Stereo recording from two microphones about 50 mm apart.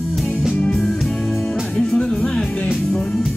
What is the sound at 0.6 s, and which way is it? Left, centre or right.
Music, left.